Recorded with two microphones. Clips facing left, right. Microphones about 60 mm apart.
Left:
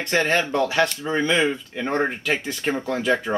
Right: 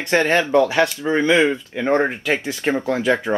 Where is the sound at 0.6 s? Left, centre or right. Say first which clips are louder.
Right 4 dB; centre.